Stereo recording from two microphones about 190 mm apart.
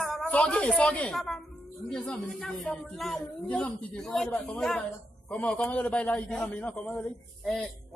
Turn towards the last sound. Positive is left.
turn(degrees=0)  # may be behind; listen again after turning